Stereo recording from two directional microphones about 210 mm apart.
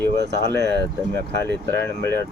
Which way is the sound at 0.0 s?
15° left (ahead or behind).